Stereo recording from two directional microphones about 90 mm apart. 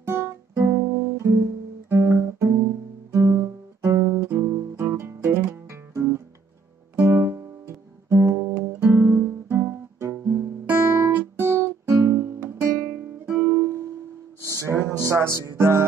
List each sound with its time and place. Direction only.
0.0 s guitar: 30° right (ahead or behind)
3.1 s music: 35° right (ahead or behind)
3.8 s guitar: 30° right (ahead or behind)
13.2 s music: 15° right (ahead or behind)
14.4 s music: 35° right (ahead or behind)